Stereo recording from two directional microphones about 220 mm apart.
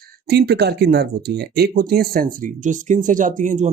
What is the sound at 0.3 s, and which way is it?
Speech, 50° right (ahead or behind).